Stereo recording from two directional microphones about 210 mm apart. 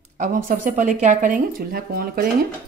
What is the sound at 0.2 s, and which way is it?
Speech, 40° right (ahead or behind).